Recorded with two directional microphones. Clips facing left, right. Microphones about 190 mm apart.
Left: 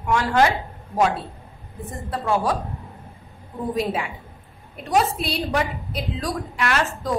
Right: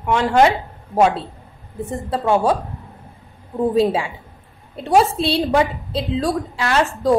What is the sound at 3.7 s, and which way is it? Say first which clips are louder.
A woman's voice: right 7 dB; 30° right (ahead or behind).